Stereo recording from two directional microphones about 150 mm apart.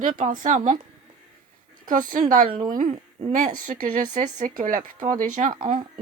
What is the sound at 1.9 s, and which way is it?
A woman's voice, 60° right (ahead or behind).